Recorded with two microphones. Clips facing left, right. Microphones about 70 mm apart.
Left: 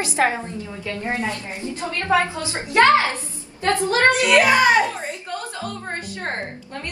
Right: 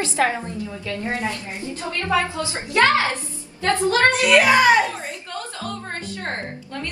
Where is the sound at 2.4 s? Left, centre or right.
Left.